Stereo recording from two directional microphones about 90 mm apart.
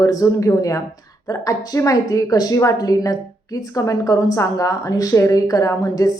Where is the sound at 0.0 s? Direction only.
40° left (ahead or behind).